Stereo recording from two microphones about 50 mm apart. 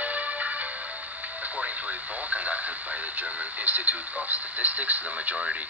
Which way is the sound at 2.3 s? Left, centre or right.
Right.